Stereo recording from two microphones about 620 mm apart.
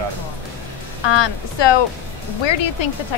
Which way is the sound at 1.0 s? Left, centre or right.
Left.